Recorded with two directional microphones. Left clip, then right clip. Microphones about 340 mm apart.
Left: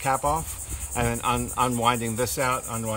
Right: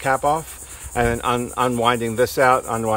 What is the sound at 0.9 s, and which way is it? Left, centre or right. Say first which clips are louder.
Speech: right 6 dB; centre.